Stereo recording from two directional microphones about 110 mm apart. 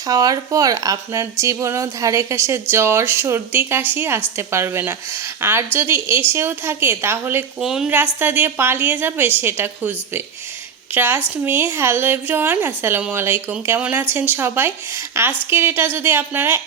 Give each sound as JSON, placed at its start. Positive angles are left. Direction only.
{"t": 0.0, "sound": "speech", "side_deg": -35}
{"t": 7.6, "sound": "a woman's voice", "side_deg": -5}
{"t": 7.9, "sound": "speech", "side_deg": -15}